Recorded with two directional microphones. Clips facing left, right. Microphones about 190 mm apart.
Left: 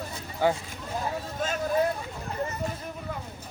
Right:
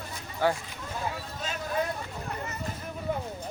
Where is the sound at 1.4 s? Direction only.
50° left (ahead or behind).